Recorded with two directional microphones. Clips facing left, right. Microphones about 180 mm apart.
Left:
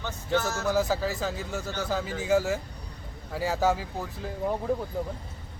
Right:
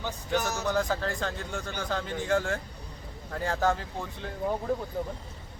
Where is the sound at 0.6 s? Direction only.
5° left (ahead or behind).